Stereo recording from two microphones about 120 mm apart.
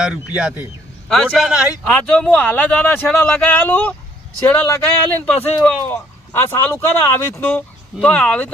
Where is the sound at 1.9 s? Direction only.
10° left (ahead or behind).